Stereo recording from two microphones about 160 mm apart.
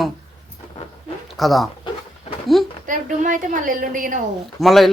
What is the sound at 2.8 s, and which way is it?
A woman's voice, 55° right (ahead or behind).